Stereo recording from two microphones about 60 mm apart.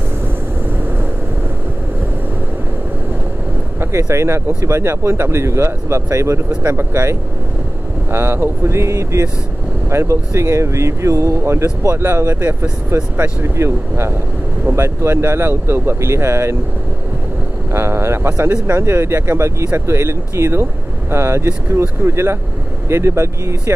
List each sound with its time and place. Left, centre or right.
3.8 s speech: right
12.0 s speech: right
17.7 s speech: right